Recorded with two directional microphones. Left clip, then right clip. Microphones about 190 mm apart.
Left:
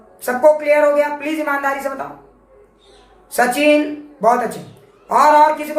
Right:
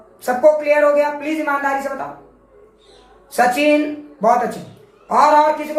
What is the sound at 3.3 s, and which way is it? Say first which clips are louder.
Speech: left 1 dB; 20° left (ahead or behind).